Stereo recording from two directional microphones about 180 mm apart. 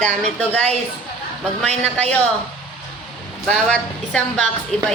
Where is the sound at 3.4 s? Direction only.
5° left (ahead or behind).